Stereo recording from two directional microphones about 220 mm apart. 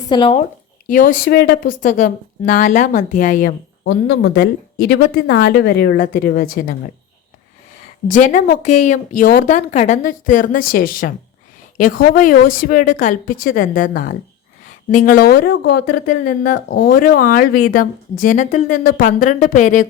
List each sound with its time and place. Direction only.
0.1 s speech: 25° left (ahead or behind)
0.9 s speech: 35° left (ahead or behind)
3.8 s speech: 55° left (ahead or behind)
8.0 s speech: 35° left (ahead or behind)